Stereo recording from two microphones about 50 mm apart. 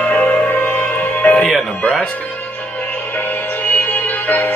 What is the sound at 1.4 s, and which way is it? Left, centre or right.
Music, centre.